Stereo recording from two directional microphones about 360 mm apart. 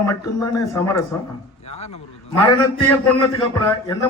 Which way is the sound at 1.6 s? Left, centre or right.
Centre.